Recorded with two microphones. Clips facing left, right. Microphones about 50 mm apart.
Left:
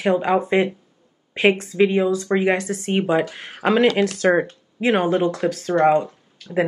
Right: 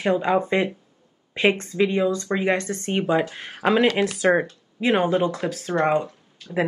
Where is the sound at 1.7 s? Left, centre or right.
Centre.